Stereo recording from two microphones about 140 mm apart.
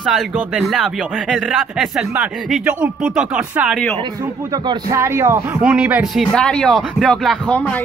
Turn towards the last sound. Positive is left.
turn(degrees=10)  # may be behind; listen again after turning